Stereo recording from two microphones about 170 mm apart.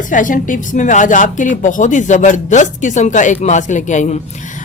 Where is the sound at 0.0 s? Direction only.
50° left (ahead or behind).